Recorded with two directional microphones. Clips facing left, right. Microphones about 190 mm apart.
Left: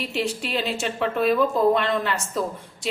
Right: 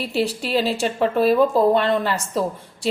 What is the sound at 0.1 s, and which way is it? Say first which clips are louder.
A woman's voice: right 7 dB; 35° right (ahead or behind).